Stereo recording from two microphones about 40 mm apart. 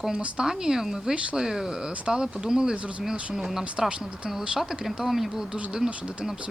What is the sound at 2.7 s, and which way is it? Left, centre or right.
Speech, right.